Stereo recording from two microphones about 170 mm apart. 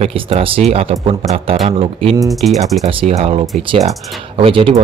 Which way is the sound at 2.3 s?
Centre (ahead or behind).